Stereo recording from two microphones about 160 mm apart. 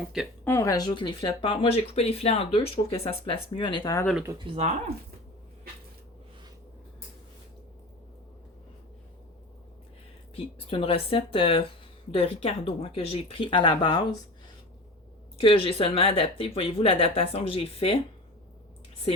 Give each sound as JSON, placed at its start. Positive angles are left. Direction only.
{"t": 0.4, "sound": "speech", "side_deg": 15}
{"t": 4.4, "sound": "speech", "side_deg": -40}
{"t": 10.3, "sound": "speech", "side_deg": 35}
{"t": 15.4, "sound": "speech", "side_deg": 35}